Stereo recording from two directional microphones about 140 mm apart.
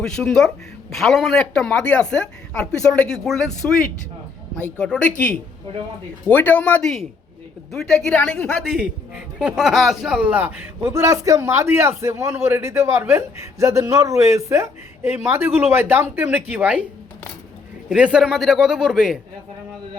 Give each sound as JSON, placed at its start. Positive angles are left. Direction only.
{"t": 0.0, "sound": "a woman's voice", "side_deg": 5}
{"t": 17.8, "sound": "speech", "side_deg": -5}